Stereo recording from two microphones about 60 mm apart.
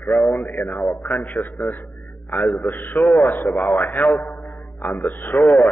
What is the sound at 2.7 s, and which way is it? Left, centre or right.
Speech, left.